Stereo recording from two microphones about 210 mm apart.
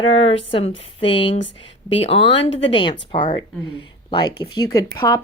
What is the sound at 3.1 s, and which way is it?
Speech, 20° left (ahead or behind).